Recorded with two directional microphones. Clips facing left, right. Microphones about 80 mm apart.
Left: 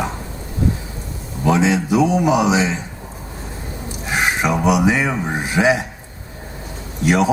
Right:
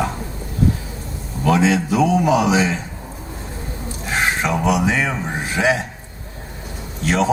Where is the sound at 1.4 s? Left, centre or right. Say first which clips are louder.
Even; centre.